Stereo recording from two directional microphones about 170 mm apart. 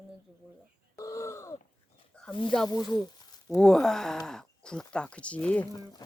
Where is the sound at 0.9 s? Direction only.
20° left (ahead or behind).